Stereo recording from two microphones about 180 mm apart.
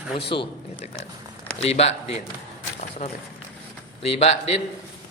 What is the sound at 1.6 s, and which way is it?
Speech, 35° left (ahead or behind).